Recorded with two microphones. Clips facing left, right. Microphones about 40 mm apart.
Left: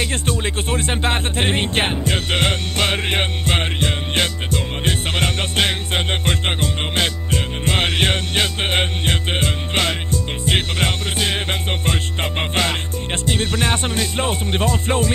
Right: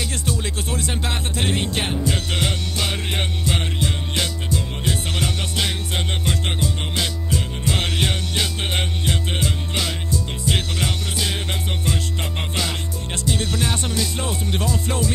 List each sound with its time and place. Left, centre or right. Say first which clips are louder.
0.0 s music: left 4 dB; left